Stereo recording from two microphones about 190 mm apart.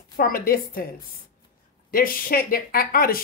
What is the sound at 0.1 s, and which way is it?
Speech, 50° left (ahead or behind).